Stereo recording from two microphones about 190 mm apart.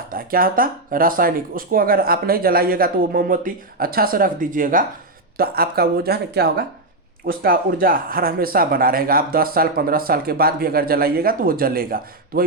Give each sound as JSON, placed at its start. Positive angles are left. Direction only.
{"t": 0.1, "sound": "speech", "side_deg": -50}